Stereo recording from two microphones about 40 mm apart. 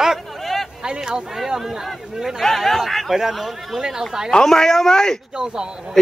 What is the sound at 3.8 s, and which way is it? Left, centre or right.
Speech, centre.